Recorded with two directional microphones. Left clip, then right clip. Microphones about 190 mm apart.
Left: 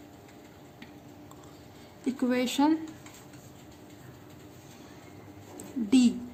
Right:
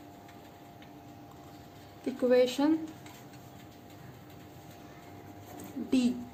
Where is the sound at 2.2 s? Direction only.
35° left (ahead or behind).